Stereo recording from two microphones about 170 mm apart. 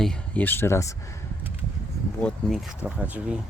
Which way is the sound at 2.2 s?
5° left (ahead or behind).